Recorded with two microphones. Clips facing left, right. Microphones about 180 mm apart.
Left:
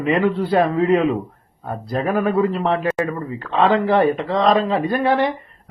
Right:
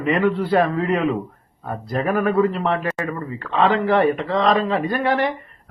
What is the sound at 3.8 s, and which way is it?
Speech, 15° left (ahead or behind).